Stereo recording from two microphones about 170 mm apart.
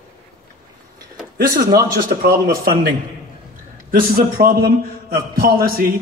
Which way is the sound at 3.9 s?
60° right (ahead or behind).